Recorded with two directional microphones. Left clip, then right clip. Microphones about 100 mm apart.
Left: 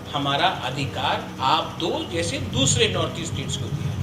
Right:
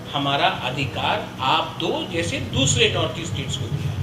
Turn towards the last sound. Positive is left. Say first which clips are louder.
# right 1 dB
turn(degrees=25)  # may be behind; listen again after turning